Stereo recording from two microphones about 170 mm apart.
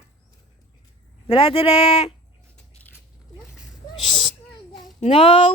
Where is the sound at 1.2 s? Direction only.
30° left (ahead or behind).